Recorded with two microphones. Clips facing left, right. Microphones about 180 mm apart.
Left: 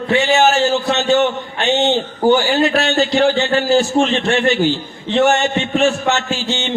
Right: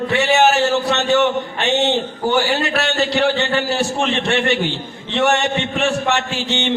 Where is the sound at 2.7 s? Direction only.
65° right (ahead or behind).